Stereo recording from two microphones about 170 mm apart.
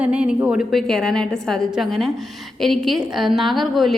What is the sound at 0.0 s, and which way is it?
A woman's voice, 5° right (ahead or behind).